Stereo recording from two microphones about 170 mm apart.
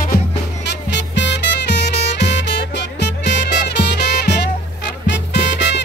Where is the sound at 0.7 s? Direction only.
90° left.